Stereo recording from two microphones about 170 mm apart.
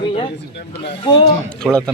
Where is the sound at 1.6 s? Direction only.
5° left (ahead or behind).